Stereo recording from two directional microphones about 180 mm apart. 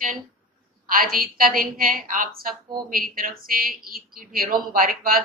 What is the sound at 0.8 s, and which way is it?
A woman's voice, 50° right (ahead or behind).